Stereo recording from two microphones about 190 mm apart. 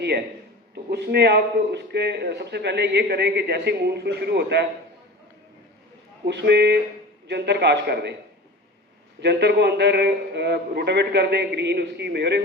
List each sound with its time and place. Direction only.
0.9 s a man's voice: 60° right (ahead or behind)
6.2 s a man's voice: 65° right (ahead or behind)
9.2 s a man's voice: 60° right (ahead or behind)